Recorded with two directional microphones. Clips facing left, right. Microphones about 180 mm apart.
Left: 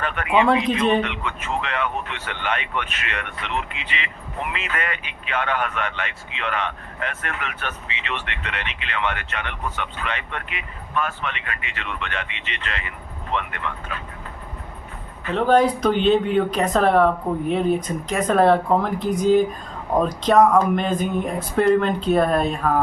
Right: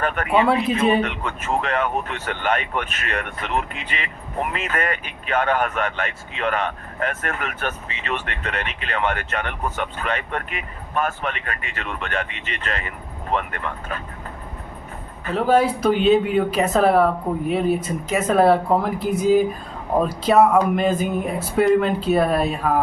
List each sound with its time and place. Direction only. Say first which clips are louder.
0.0 s speech: right 1 dB; 45° right (ahead or behind)
0.4 s speech: even; 5° right (ahead or behind)
1.0 s speech: right 2 dB; 45° right (ahead or behind)
15.3 s speech: left 1 dB; 5° right (ahead or behind)